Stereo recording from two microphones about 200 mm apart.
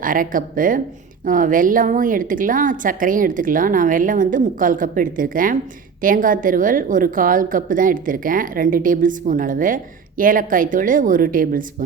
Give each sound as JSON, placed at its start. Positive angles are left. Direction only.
{"t": 0.0, "sound": "a woman's voice", "side_deg": -45}